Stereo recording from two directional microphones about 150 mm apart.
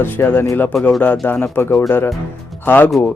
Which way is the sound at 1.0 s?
10° left (ahead or behind).